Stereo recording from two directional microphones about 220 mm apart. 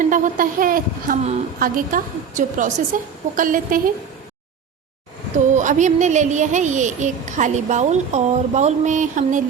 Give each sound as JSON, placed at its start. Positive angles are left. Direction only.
{"t": 0.0, "sound": "a woman's voice", "side_deg": -35}
{"t": 5.5, "sound": "a woman's voice", "side_deg": -35}